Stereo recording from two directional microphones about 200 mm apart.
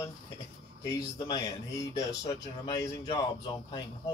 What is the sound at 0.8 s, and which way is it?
Speech, 20° left (ahead or behind).